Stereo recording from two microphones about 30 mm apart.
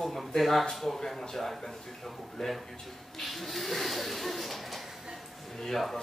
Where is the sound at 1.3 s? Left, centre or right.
Centre.